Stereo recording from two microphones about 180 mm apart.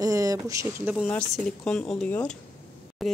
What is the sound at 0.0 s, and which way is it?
Speech, 20° right (ahead or behind).